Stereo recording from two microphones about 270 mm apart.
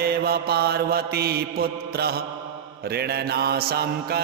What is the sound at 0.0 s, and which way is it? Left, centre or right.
Mantra, right.